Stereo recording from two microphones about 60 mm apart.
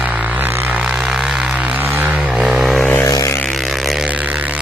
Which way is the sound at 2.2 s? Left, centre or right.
Centre.